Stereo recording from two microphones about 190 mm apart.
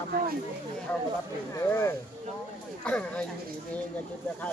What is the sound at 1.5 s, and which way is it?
Speech, 15° left (ahead or behind).